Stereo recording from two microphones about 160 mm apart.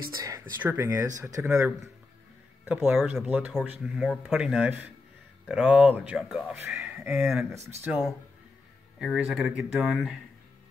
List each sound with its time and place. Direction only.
0.0 s speech: 25° right (ahead or behind)
9.0 s speech: 5° right (ahead or behind)